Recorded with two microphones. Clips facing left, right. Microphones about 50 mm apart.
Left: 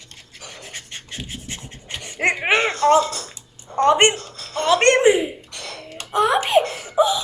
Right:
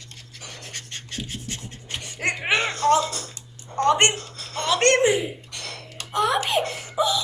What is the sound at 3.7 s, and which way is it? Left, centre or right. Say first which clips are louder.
A woman's voice: left 4 dB; left.